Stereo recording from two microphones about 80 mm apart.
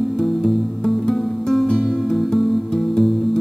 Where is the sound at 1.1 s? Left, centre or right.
Centre.